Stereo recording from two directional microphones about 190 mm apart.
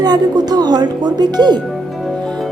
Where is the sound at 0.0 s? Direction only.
20° right (ahead or behind).